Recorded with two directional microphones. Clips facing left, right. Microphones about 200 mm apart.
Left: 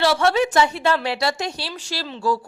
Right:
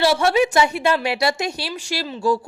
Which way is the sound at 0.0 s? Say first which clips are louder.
Right 1 dB; 10° right (ahead or behind).